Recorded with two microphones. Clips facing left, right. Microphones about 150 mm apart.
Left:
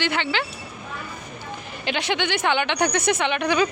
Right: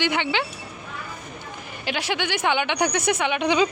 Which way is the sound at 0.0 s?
15° right (ahead or behind).